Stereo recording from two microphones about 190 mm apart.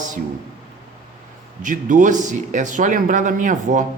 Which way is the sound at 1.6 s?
40° right (ahead or behind).